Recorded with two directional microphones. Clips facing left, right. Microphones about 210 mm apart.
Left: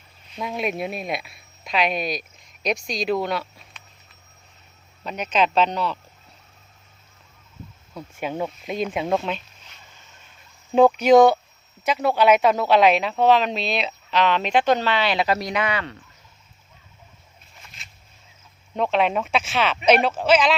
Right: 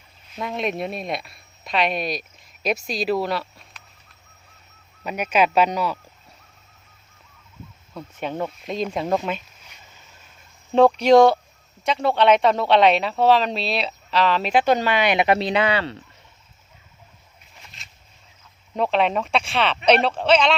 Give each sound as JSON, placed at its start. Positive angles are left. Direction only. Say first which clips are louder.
{"t": 0.3, "sound": "speech", "louder": "right 1 dB", "side_deg": 0}
{"t": 5.0, "sound": "speech", "louder": "right 2 dB", "side_deg": -10}
{"t": 7.9, "sound": "speech", "louder": "even", "side_deg": 10}
{"t": 11.0, "sound": "speech", "louder": "even", "side_deg": 5}
{"t": 17.8, "sound": "a sound", "louder": "even", "side_deg": 0}
{"t": 18.7, "sound": "speech", "louder": "even", "side_deg": 0}